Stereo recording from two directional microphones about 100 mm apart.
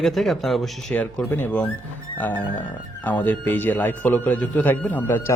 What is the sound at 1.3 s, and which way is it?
Speech, 15° left (ahead or behind).